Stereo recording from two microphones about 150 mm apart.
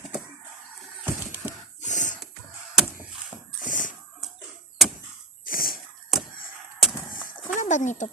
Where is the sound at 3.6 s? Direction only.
60° left (ahead or behind).